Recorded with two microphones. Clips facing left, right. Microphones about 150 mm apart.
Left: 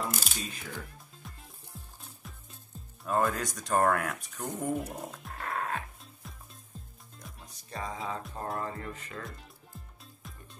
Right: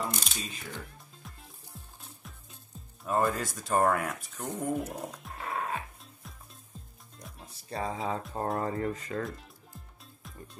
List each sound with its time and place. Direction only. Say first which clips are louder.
0.0 s a sound: even; centre (ahead or behind)
0.9 s music: left 1 dB; centre (ahead or behind)
3.0 s speech: right 1 dB; centre (ahead or behind)
7.2 s music: right 2 dB; centre (ahead or behind)
7.5 s speech: right 4 dB; 30° right (ahead or behind)
9.2 s speech: right 7 dB; centre (ahead or behind)